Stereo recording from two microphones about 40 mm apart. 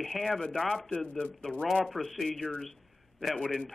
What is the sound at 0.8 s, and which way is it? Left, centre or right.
Speech, left.